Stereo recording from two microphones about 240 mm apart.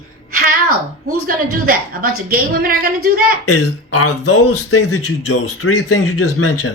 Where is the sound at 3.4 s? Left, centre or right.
Left.